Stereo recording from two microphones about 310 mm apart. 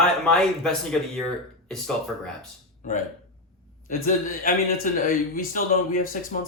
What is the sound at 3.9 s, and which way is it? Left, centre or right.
Speech, left.